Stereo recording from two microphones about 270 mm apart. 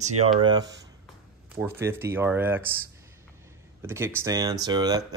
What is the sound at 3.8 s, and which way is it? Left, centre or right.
Speech, centre.